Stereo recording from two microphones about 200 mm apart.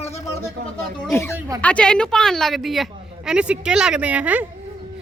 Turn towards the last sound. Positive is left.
turn(degrees=-10)  # may be behind; listen again after turning